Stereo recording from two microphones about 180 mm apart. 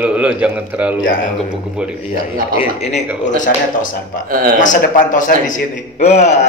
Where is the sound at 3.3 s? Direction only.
45° left (ahead or behind).